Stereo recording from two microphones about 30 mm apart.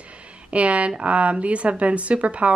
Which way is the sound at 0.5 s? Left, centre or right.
Right.